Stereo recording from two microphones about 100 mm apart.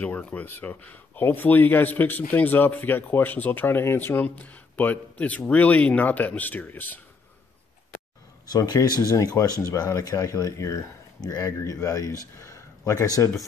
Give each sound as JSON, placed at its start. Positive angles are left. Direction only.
{"t": 0.0, "sound": "speech", "side_deg": 15}
{"t": 8.5, "sound": "speech", "side_deg": 40}
{"t": 12.4, "sound": "a sound", "side_deg": 30}